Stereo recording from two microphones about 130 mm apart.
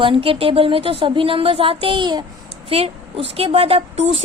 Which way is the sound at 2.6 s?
50° right (ahead or behind).